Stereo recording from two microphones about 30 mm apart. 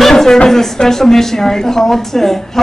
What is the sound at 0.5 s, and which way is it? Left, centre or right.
Speech, centre.